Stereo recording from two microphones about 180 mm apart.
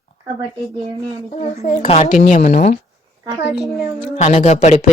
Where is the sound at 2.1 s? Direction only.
45° left (ahead or behind).